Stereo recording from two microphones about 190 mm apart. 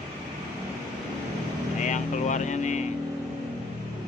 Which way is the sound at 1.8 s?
40° left (ahead or behind).